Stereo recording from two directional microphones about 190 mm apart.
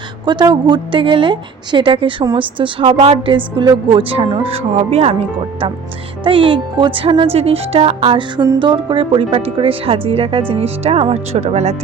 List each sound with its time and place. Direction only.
0.3 s a woman's voice: 20° right (ahead or behind)
6.2 s a woman's voice: 25° right (ahead or behind)